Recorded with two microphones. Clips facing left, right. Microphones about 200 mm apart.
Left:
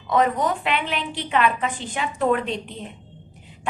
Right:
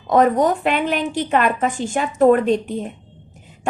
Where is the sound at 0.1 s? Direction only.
45° right (ahead or behind).